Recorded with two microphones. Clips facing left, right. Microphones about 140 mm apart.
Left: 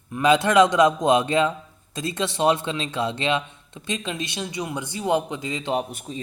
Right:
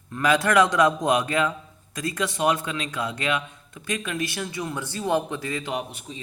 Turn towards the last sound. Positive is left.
turn(degrees=45)  # may be behind; listen again after turning